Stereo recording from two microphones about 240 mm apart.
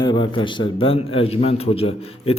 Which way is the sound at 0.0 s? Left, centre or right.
Centre.